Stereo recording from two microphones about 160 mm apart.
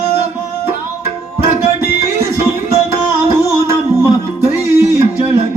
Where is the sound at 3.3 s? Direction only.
15° right (ahead or behind).